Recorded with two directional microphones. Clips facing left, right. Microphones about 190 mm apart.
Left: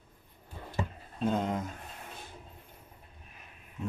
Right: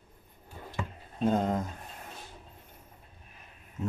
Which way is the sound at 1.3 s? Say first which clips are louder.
Right 3 dB; 40° right (ahead or behind).